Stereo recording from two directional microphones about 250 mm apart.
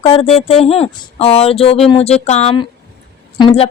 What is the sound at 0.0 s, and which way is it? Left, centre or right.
Speech, left.